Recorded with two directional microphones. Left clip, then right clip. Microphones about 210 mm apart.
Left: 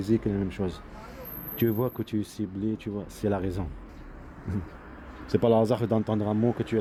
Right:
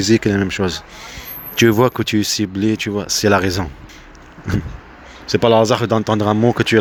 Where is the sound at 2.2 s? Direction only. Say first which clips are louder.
Right 16 dB; 50° right (ahead or behind).